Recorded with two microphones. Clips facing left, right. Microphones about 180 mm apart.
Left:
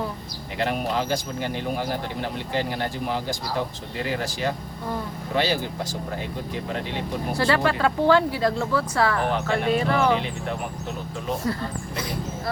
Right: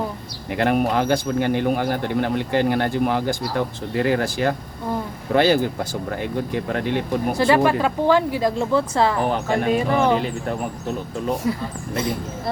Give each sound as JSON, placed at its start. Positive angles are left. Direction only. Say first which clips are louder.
{"t": 0.5, "sound": "speech", "louder": "right 6 dB", "side_deg": -55}
{"t": 7.3, "sound": "speech", "louder": "right 4 dB", "side_deg": -15}
{"t": 11.4, "sound": "speech", "louder": "right 2 dB", "side_deg": -15}